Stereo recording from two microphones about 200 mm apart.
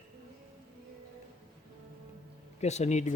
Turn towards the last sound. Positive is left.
turn(degrees=35)  # may be behind; listen again after turning